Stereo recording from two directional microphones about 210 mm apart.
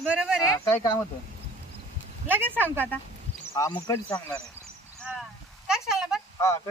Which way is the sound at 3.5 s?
15° left (ahead or behind).